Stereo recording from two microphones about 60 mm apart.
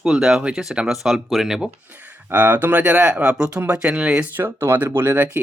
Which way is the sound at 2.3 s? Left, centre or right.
Right.